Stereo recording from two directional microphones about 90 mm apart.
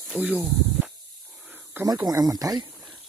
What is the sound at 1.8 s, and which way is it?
Speech, 45° right (ahead or behind).